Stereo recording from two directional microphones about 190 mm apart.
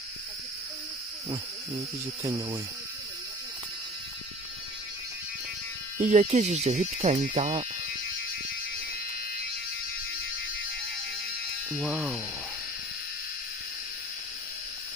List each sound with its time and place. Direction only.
2.2 s speech: 20° right (ahead or behind)
6.0 s speech: 40° right (ahead or behind)
11.7 s speech: 5° right (ahead or behind)